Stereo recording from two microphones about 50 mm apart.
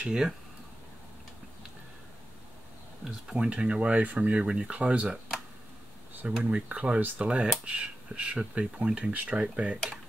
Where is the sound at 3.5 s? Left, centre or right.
Right.